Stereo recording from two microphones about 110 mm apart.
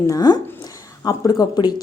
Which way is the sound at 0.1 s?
35° left (ahead or behind).